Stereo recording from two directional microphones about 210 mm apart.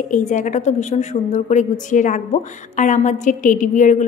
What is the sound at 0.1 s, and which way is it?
A woman's voice, 35° left (ahead or behind).